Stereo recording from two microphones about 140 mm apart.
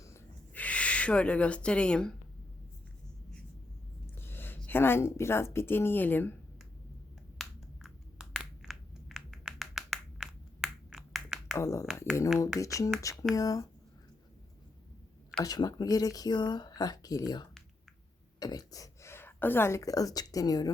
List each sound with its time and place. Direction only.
0.5 s speech: 10° left (ahead or behind)
4.2 s a woman's voice: 15° left (ahead or behind)
7.3 s a sound: centre (ahead or behind)
11.5 s speech: 20° left (ahead or behind)
15.4 s speech: 30° left (ahead or behind)